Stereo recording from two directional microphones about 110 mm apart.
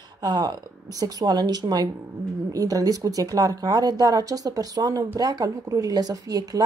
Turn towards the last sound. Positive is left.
turn(degrees=-35)  # may be behind; listen again after turning